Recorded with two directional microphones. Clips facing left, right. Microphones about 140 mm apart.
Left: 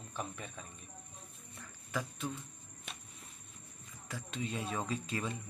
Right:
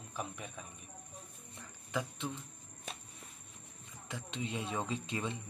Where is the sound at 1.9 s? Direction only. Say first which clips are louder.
Right 1 dB; 20° right (ahead or behind).